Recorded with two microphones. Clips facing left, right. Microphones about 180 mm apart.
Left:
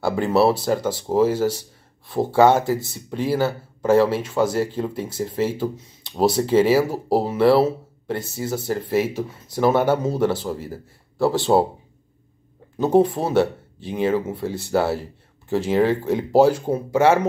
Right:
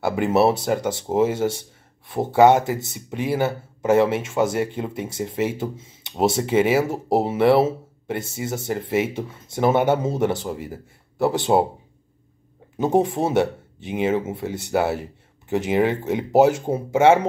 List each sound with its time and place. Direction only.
0.2 s speech: 20° right (ahead or behind)
12.7 s speech: 25° right (ahead or behind)